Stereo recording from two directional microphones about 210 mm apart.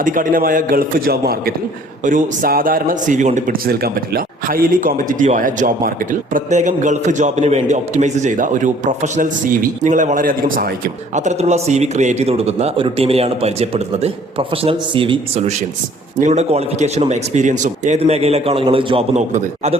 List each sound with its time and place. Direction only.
0.0 s a man's voice: 40° right (ahead or behind)